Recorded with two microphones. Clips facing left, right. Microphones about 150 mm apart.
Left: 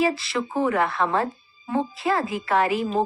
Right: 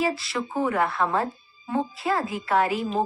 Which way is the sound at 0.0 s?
90° left.